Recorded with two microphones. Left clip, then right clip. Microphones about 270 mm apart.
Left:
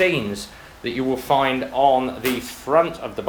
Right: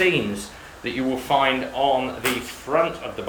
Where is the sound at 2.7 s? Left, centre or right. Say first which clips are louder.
Left 4 dB; left.